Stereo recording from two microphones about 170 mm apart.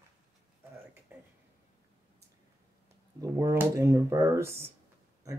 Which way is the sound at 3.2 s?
15° right (ahead or behind).